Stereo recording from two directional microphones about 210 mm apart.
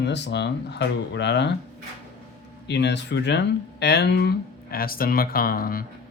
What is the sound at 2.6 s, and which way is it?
Speech, 55° left (ahead or behind).